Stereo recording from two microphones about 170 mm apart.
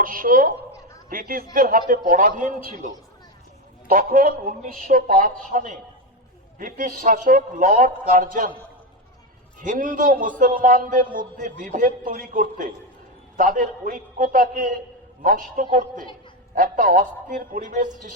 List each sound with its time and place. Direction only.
0.0 s a man's voice: 55° right (ahead or behind)
9.6 s a man's voice: 50° right (ahead or behind)